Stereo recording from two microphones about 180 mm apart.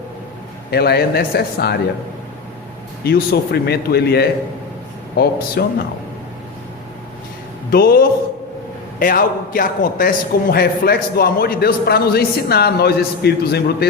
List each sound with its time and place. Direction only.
0.7 s a man's voice: 60° left (ahead or behind)
3.0 s a man's voice: 60° left (ahead or behind)
7.7 s a man's voice: 60° left (ahead or behind)